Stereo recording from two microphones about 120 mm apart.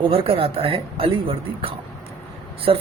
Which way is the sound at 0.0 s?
50° right (ahead or behind).